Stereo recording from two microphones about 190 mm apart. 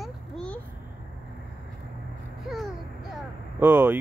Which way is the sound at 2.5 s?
Centre (ahead or behind).